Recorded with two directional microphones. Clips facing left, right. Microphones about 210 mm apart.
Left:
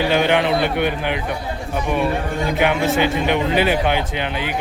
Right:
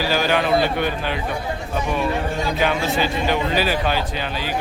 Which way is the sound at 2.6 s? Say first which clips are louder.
Left 4 dB; 20° left (ahead or behind).